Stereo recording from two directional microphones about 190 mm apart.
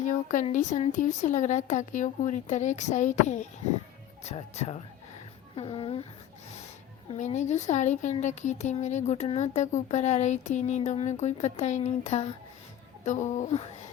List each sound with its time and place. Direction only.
0.0 s speech: 40° left (ahead or behind)
7.1 s speech: 35° left (ahead or behind)